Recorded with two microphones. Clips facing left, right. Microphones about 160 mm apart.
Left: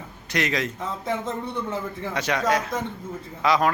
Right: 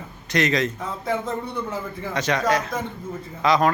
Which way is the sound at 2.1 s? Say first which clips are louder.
Right 2 dB; 10° left (ahead or behind).